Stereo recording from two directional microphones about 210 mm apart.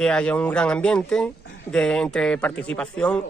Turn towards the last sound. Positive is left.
turn(degrees=5)  # may be behind; listen again after turning